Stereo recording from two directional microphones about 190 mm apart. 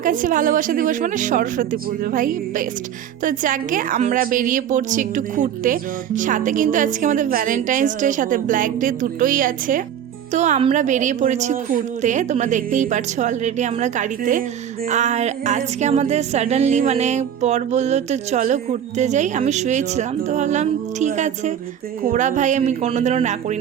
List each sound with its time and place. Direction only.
0.0 s a woman's voice: 45° right (ahead or behind)